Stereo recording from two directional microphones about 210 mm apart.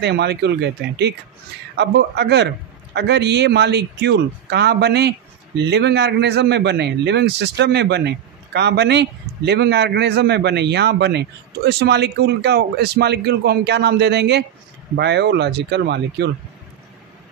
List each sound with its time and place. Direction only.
0.0 s a man's voice: 50° right (ahead or behind)